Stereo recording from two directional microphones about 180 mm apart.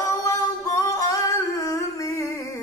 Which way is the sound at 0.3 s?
20° left (ahead or behind).